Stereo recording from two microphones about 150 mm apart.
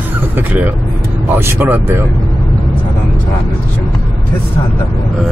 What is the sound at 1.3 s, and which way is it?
Speech, 15° right (ahead or behind).